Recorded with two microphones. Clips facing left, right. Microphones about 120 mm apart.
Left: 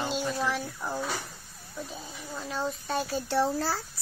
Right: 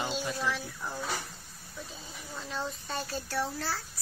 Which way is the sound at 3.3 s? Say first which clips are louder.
Left 7 dB; 35° left (ahead or behind).